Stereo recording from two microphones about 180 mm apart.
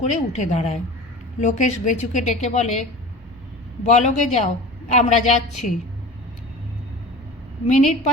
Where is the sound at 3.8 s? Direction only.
40° left (ahead or behind).